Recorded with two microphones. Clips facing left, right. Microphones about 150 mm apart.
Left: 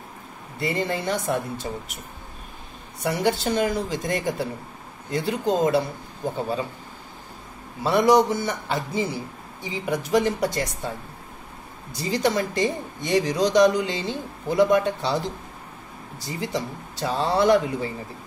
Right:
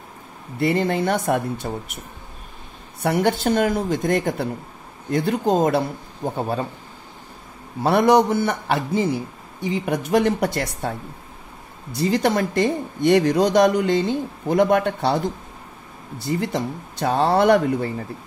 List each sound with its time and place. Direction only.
0.6 s speech: 60° right (ahead or behind)
3.0 s speech: 55° right (ahead or behind)
7.8 s speech: 60° right (ahead or behind)
11.9 s speech: 55° right (ahead or behind)